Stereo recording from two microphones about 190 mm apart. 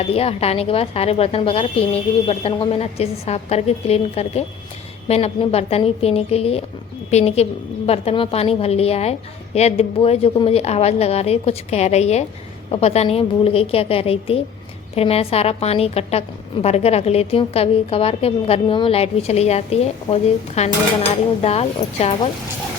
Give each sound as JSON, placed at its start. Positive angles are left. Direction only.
{"t": 0.0, "sound": "a woman's voice", "side_deg": 30}